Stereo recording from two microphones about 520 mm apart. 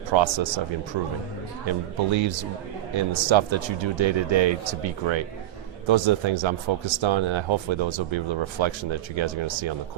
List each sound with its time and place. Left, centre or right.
0.1 s speech: right
1.6 s speech: right